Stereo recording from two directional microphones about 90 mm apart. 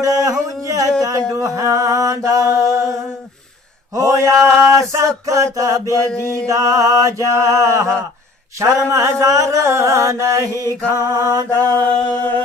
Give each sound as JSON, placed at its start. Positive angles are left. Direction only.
{"t": 0.0, "sound": "a sound", "side_deg": -40}
{"t": 1.0, "sound": "mantra", "side_deg": -40}
{"t": 3.9, "sound": "mantra", "side_deg": -35}
{"t": 11.5, "sound": "music", "side_deg": 20}